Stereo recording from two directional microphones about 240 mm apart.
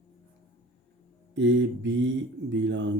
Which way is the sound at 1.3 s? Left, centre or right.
Right.